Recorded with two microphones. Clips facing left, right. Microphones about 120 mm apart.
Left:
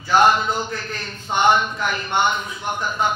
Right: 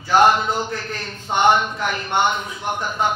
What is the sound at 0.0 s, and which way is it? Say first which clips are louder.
A man's voice: right 1 dB; 60° right (ahead or behind).